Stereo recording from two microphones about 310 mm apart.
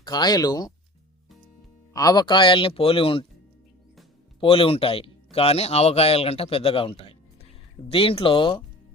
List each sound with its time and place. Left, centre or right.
0.0 s speech: centre
1.9 s speech: centre
4.4 s speech: centre